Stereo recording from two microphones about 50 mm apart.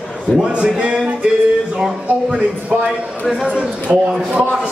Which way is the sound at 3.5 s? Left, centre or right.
Right.